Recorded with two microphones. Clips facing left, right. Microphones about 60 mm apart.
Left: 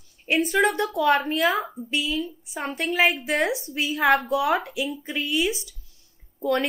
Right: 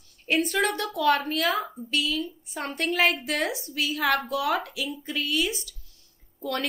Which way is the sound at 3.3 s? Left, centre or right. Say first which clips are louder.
Left 4 dB; left.